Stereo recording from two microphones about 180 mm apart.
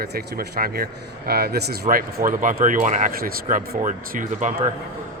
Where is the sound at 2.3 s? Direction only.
45° right (ahead or behind).